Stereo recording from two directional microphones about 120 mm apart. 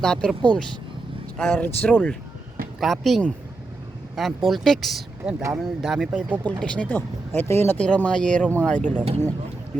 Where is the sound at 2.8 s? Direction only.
Centre (ahead or behind).